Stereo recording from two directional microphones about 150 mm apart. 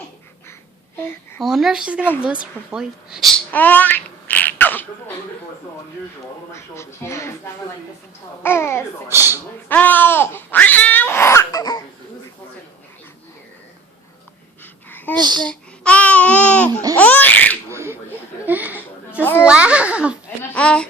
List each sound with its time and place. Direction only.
1.4 s speech: centre (ahead or behind)
3.5 s a sound: 10° left (ahead or behind)
6.5 s speech: 20° left (ahead or behind)
8.4 s a child's voice: 15° left (ahead or behind)
9.0 s a child's voice: 15° right (ahead or behind)
9.6 s babbling: 10° left (ahead or behind)
14.6 s a sound: 10° left (ahead or behind)
15.1 s a child's voice: 30° right (ahead or behind)
15.4 s speech: 5° left (ahead or behind)
16.9 s laughter: 10° left (ahead or behind)
17.7 s a sound: 20° right (ahead or behind)
19.2 s a child's voice: 15° left (ahead or behind)
19.5 s a child's voice: 10° right (ahead or behind)
20.5 s a child's voice: 5° left (ahead or behind)